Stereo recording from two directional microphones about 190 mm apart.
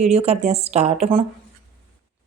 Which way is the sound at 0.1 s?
35° right (ahead or behind).